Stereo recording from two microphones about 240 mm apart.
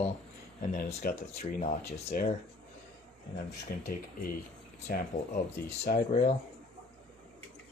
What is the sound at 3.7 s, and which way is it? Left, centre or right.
Speech, left.